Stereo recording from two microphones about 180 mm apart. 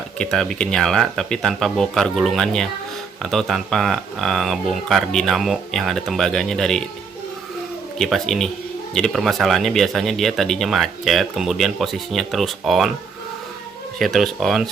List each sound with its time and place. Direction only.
0.2 s speech: 5° left (ahead or behind)
7.9 s speech: centre (ahead or behind)
14.0 s speech: centre (ahead or behind)